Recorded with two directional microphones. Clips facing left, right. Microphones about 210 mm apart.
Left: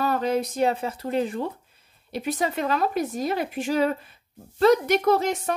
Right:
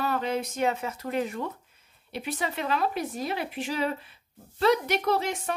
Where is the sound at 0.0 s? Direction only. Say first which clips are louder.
Left 5 dB; 40° left (ahead or behind).